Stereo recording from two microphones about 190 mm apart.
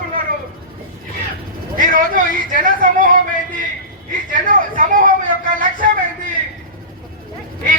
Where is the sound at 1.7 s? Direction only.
45° right (ahead or behind).